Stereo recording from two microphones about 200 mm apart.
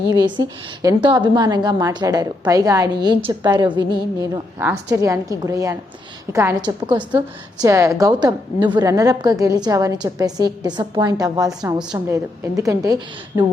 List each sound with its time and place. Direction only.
0.1 s a woman's voice: 20° right (ahead or behind)